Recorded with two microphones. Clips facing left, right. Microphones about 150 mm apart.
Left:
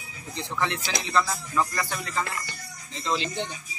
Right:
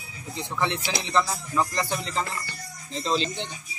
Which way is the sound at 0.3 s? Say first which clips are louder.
Right 1 dB; 15° right (ahead or behind).